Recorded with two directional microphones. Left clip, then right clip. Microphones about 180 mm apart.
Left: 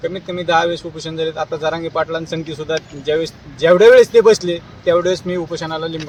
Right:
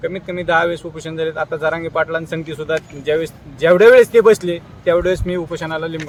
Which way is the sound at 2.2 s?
25° right (ahead or behind).